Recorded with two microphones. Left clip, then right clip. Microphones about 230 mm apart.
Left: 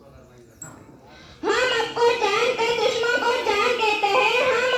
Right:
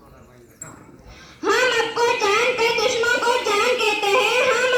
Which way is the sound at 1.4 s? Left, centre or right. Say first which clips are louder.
Right 3 dB; right.